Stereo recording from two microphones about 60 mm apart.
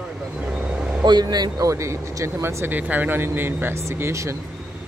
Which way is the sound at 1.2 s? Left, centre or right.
Right.